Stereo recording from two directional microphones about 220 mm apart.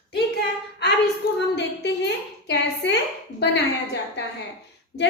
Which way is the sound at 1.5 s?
50° left (ahead or behind).